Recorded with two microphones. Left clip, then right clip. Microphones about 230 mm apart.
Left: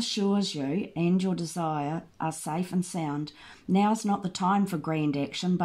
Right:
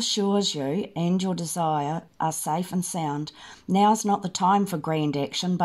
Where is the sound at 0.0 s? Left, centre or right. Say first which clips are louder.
Right 5 dB; right.